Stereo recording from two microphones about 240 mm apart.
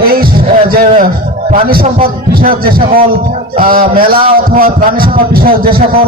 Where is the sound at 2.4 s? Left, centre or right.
Right.